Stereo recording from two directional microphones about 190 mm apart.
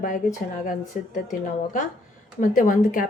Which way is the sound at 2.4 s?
45° left (ahead or behind).